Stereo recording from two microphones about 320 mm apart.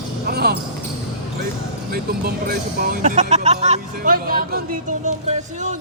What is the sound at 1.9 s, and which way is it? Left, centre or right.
Speech, right.